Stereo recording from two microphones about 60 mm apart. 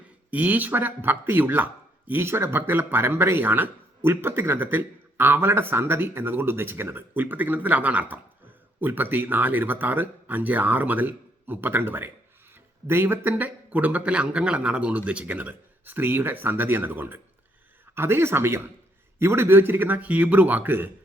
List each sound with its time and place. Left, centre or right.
0.3 s speech: right
13.3 s a man's voice: right